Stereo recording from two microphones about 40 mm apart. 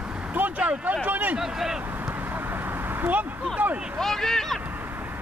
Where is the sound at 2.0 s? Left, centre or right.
Right.